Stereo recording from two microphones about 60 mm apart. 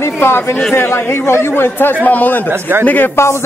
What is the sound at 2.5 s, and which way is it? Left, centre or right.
Speech, right.